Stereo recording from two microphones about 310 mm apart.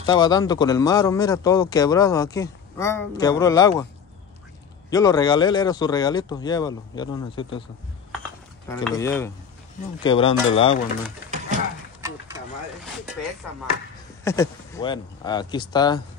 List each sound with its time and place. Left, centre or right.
0.0 s speech: centre
4.8 s speech: centre
8.8 s speech: centre
11.5 s speech: right
14.2 s speech: centre